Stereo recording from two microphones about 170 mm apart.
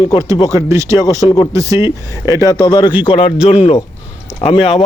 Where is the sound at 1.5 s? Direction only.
20° right (ahead or behind).